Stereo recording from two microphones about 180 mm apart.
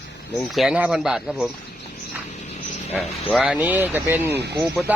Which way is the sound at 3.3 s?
5° right (ahead or behind).